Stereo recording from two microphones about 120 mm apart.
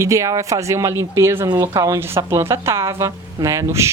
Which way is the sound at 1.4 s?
35° right (ahead or behind).